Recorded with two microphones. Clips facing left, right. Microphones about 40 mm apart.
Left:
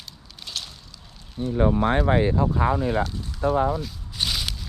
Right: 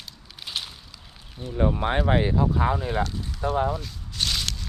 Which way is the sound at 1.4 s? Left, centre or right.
Left.